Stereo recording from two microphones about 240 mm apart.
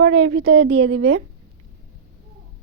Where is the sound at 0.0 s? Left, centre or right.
Right.